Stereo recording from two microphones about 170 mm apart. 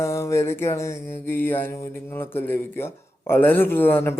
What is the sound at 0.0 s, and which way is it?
Mantra, 15° left (ahead or behind).